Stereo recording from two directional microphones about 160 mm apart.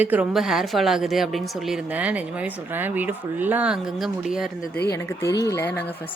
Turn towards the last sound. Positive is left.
turn(degrees=15)  # may be behind; listen again after turning